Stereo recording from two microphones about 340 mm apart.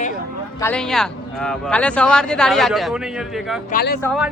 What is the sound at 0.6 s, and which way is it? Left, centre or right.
Speech, centre.